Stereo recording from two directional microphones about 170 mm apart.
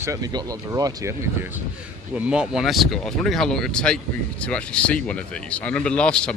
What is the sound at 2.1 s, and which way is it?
Speech, 5° right (ahead or behind).